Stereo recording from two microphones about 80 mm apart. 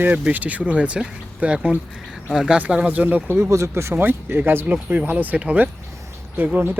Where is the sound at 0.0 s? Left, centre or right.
Right.